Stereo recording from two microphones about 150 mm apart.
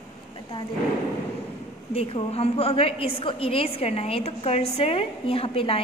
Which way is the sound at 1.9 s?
40° left (ahead or behind).